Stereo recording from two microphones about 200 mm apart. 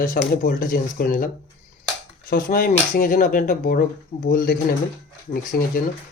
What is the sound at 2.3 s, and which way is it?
Speech, 45° left (ahead or behind).